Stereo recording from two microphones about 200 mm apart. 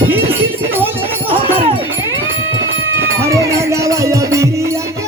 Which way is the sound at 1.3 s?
25° right (ahead or behind).